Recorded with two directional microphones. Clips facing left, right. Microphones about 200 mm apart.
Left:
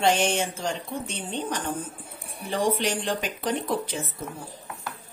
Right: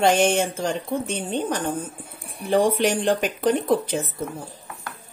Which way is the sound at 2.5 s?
55° right (ahead or behind).